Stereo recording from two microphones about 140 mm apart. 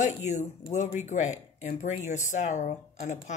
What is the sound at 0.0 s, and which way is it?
Speech, 60° left (ahead or behind).